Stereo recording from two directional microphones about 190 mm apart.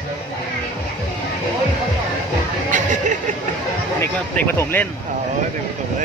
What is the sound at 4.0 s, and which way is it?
Speech, 10° left (ahead or behind).